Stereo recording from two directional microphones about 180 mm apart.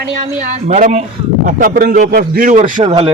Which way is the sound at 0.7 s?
40° right (ahead or behind).